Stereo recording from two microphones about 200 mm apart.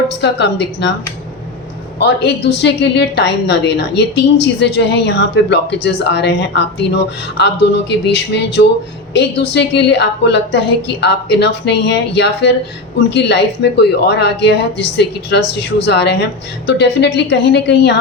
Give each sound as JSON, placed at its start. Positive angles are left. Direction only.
{"t": 0.2, "sound": "speech", "side_deg": 60}
{"t": 2.0, "sound": "speech", "side_deg": 60}